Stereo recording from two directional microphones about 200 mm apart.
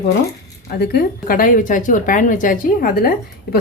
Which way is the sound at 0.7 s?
50° left (ahead or behind).